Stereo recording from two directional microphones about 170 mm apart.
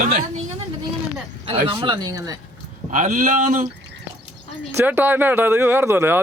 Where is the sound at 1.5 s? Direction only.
30° right (ahead or behind).